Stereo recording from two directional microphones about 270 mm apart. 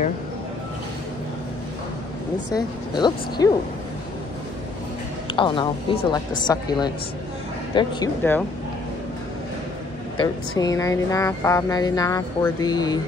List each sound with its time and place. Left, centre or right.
2.5 s music: centre
5.3 s music: centre
10.6 s music: centre